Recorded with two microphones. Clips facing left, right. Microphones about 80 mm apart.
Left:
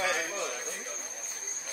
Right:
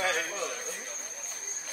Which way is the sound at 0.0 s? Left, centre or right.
Right.